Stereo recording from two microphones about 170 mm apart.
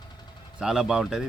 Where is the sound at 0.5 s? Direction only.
5° right (ahead or behind).